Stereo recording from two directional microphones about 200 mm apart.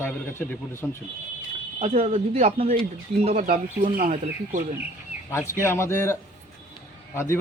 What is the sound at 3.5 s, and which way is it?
Speech, 45° right (ahead or behind).